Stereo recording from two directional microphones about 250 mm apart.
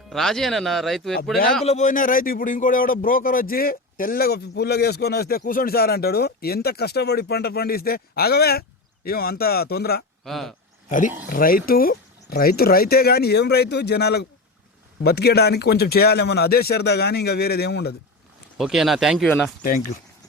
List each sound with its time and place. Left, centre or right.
0.1 s speech: centre
1.6 s speech: left
10.2 s speech: centre
10.8 s speech: left
18.5 s speech: centre